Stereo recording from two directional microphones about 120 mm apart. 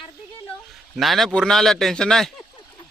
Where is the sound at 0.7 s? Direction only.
Centre (ahead or behind).